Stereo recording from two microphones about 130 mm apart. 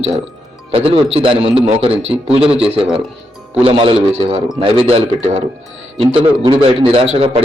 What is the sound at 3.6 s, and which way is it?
A man's voice, 45° right (ahead or behind).